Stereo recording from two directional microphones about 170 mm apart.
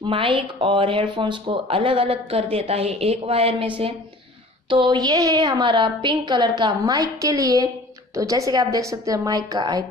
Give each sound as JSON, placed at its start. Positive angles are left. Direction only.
{"t": 0.0, "sound": "a woman's voice", "side_deg": -30}